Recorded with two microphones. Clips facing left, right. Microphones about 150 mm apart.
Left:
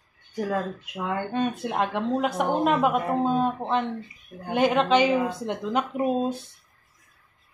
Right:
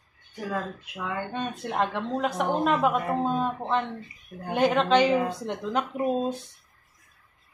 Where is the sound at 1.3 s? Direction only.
5° left (ahead or behind).